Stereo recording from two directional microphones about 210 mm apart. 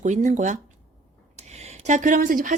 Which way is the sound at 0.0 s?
35° right (ahead or behind).